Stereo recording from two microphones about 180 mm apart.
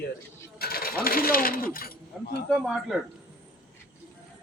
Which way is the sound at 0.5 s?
55° left (ahead or behind).